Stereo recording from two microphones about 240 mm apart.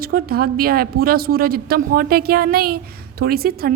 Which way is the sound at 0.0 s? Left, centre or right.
Right.